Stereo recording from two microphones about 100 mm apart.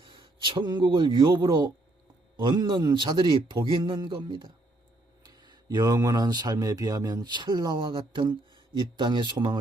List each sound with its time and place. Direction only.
0.0 s a man's voice: 55° right (ahead or behind)